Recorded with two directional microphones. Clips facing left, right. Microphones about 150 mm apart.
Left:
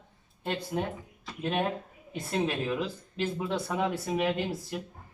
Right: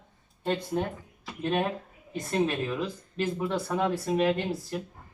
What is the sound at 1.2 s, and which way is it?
Speech, centre (ahead or behind).